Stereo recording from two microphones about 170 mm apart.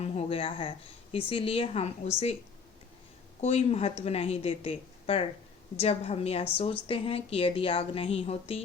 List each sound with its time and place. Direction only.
0.0 s a woman's voice: 35° left (ahead or behind)
3.4 s a woman's voice: 40° left (ahead or behind)